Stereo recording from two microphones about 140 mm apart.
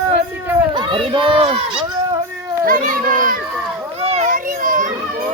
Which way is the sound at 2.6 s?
80° right.